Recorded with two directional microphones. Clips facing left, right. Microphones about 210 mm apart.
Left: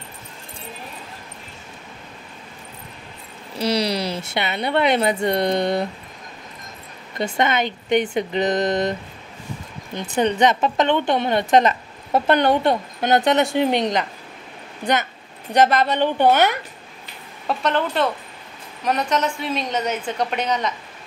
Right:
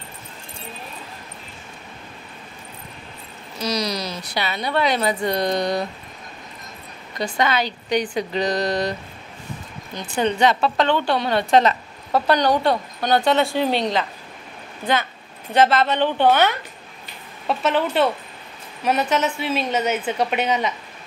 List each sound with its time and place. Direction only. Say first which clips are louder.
3.5 s speech: left 3 dB; 30° left (ahead or behind)
7.2 s speech: left 1 dB; 25° left (ahead or behind)
10.1 s a woman's voice: left 1 dB; 20° left (ahead or behind)
15.5 s a woman's voice: even; 15° left (ahead or behind)
17.5 s a woman's voice: right 1 dB; 5° right (ahead or behind)